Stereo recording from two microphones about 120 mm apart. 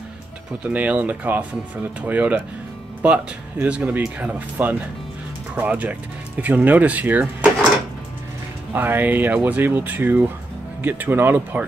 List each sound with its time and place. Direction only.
0.7 s speech: 10° right (ahead or behind)
8.7 s speech: 15° right (ahead or behind)